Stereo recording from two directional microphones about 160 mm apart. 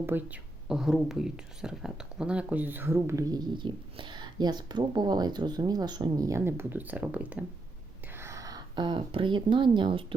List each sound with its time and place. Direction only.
0.0 s speech: 10° right (ahead or behind); by 10.2 s 35° right (ahead or behind)